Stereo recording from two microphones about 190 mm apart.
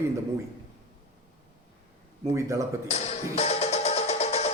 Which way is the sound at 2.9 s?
35° left (ahead or behind).